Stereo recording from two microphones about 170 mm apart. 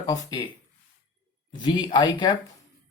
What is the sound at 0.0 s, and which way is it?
Speech, 25° left (ahead or behind).